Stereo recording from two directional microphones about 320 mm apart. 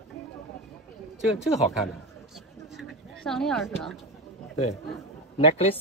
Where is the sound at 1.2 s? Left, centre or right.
Centre.